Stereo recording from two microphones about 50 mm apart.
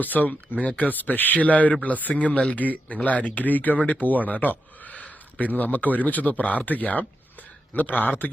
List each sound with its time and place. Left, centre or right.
0.0 s speech: left